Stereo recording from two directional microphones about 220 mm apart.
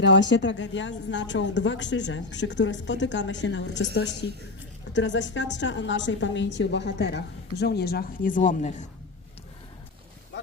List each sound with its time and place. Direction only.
0.0 s a woman's voice: 55° left (ahead or behind); by 8.9 s 35° left (ahead or behind)